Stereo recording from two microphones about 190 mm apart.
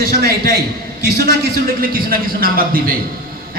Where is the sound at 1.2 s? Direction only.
50° right (ahead or behind).